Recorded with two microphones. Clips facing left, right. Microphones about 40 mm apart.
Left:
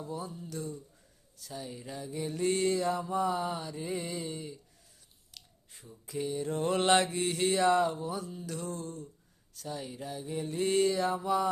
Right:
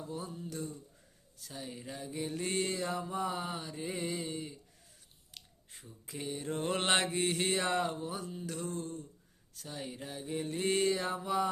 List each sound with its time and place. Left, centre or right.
0.1 s mantra: centre
5.3 s a sound: right
6.1 s mantra: right